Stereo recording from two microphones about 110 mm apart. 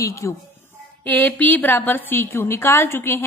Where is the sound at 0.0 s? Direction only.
30° left (ahead or behind).